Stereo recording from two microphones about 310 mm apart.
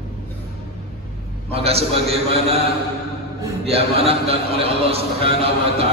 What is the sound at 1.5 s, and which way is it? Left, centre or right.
A man's voice, centre.